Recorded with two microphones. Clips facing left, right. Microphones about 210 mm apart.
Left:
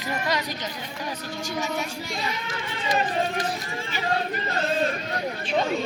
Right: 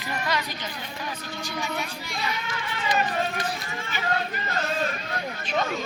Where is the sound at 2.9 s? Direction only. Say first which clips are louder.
Left 2 dB; 30° left (ahead or behind).